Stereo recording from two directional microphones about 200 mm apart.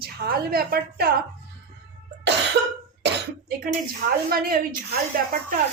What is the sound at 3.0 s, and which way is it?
Cough, 50° right (ahead or behind).